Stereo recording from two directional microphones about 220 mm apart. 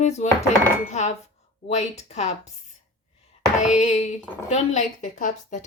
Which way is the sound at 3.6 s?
35° left (ahead or behind).